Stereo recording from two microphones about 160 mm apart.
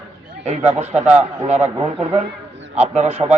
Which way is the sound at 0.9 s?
10° right (ahead or behind).